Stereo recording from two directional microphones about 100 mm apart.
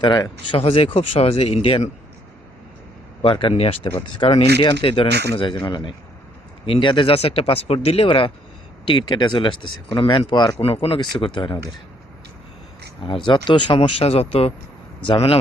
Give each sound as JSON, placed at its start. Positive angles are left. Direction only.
{"t": 0.0, "sound": "speech", "side_deg": 50}
{"t": 0.6, "sound": "speech", "side_deg": 70}
{"t": 3.2, "sound": "speech", "side_deg": 60}
{"t": 4.6, "sound": "speech", "side_deg": 55}
{"t": 5.6, "sound": "speech", "side_deg": 55}
{"t": 8.8, "sound": "speech", "side_deg": 55}
{"t": 10.6, "sound": "speech", "side_deg": 75}
{"t": 13.0, "sound": "speech", "side_deg": 55}
{"t": 15.0, "sound": "speech", "side_deg": 65}